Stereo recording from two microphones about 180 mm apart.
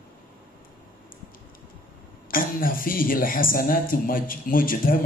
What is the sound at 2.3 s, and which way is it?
Speech, 50° left (ahead or behind).